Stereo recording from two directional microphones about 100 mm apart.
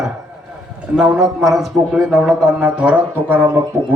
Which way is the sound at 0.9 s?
5° right (ahead or behind).